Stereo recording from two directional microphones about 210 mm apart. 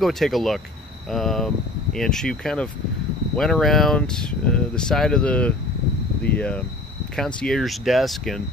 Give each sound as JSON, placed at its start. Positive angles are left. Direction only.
{"t": 0.0, "sound": "speech", "side_deg": 0}